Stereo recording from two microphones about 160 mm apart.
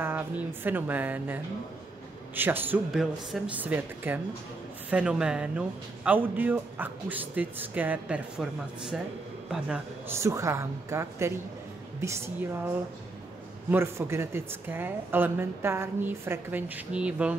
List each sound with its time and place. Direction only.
0.0 s speech: 15° right (ahead or behind)
13.7 s speech: 15° right (ahead or behind)